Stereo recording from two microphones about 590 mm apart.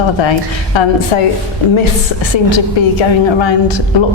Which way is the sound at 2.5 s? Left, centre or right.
Left.